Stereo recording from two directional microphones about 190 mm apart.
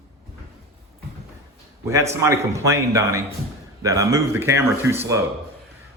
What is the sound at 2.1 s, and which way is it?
Speech, 15° right (ahead or behind).